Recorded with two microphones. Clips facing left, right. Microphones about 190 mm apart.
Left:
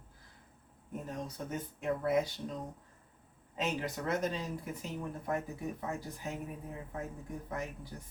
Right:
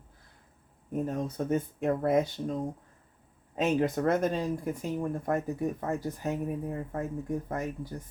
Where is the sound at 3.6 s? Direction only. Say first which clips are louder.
Right 9 dB; 55° right (ahead or behind).